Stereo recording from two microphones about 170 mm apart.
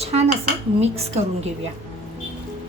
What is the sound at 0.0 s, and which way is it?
Dishes, 40° right (ahead or behind).